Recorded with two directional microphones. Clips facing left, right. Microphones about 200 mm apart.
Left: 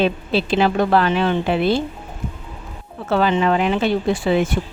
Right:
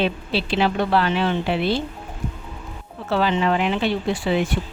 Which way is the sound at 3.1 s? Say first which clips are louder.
Left 3 dB; 50° left (ahead or behind).